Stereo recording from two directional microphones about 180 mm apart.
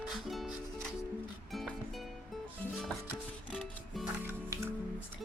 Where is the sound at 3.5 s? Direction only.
10° right (ahead or behind).